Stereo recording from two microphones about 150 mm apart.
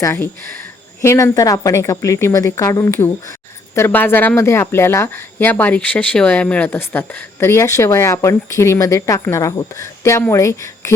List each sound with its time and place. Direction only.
0.0 s a woman's voice: 15° left (ahead or behind)